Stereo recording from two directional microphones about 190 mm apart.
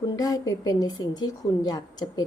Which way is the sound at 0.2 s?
20° left (ahead or behind).